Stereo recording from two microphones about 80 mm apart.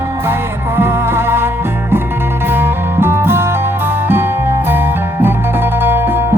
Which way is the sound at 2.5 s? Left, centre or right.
Right.